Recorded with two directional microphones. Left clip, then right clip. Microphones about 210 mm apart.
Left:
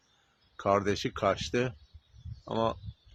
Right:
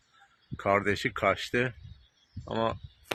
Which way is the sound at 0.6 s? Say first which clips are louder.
Right 1 dB; centre (ahead or behind).